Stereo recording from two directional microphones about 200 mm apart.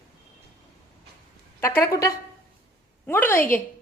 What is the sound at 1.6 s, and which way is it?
A woman's voice, 15° left (ahead or behind).